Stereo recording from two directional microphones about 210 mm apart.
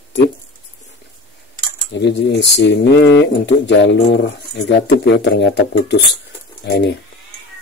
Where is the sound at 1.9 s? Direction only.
55° left (ahead or behind).